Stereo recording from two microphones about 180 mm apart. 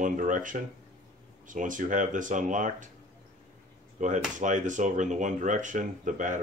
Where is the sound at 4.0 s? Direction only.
40° right (ahead or behind).